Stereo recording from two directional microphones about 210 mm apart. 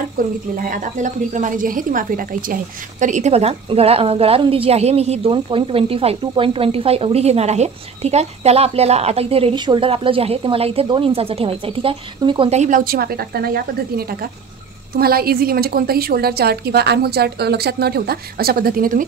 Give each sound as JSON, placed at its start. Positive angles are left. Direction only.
{"t": 0.2, "sound": "a woman's voice", "side_deg": -40}